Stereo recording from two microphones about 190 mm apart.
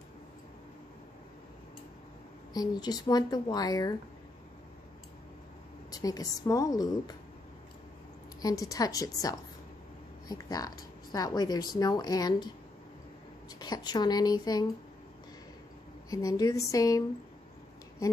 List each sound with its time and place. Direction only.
2.5 s speech: 20° left (ahead or behind)
5.9 s speech: 20° left (ahead or behind)
8.4 s a woman's voice: 20° left (ahead or behind)
13.6 s speech: 20° left (ahead or behind)
16.1 s speech: 15° left (ahead or behind)